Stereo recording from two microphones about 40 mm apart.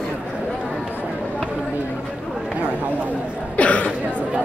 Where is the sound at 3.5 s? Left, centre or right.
Left.